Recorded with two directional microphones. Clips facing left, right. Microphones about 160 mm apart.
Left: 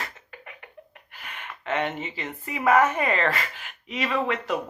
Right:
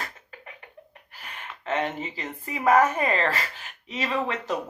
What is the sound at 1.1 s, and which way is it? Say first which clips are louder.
A woman's voice: left 1 dB; 35° right (ahead or behind).